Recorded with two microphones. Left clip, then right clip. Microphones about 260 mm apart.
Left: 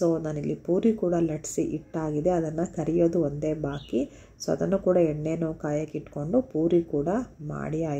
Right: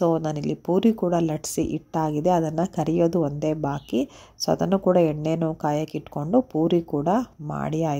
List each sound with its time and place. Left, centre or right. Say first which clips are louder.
0.0 s speech: right 3 dB; right